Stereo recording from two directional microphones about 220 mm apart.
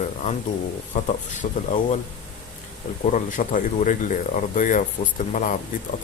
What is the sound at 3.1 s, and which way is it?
Speech, 35° left (ahead or behind).